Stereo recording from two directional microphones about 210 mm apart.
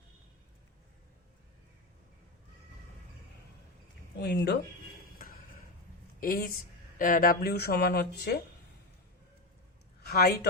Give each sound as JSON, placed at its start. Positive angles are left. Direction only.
{"t": 4.2, "sound": "speech", "side_deg": 50}
{"t": 5.1, "sound": "a sound", "side_deg": 45}
{"t": 6.1, "sound": "speech", "side_deg": 45}
{"t": 10.0, "sound": "a woman's voice", "side_deg": 50}